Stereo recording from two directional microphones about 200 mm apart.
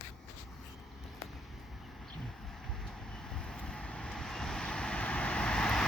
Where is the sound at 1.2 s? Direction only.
Centre (ahead or behind).